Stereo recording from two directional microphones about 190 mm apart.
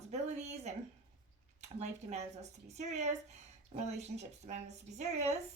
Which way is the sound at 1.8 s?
35° right (ahead or behind).